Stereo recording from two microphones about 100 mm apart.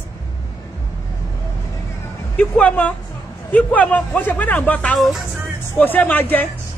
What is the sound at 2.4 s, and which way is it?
Speech, 15° left (ahead or behind).